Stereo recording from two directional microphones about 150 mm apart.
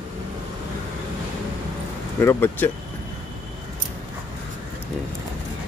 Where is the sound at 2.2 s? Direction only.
15° left (ahead or behind).